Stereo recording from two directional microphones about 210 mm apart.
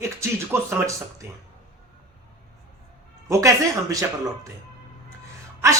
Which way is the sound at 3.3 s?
15° right (ahead or behind).